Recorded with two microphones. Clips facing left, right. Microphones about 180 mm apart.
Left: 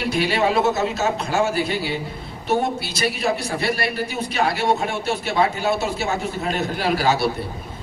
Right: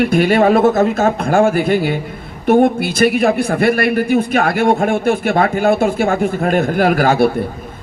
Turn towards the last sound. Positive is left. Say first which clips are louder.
# right 8 dB
turn(degrees=-50)  # may be behind; listen again after turning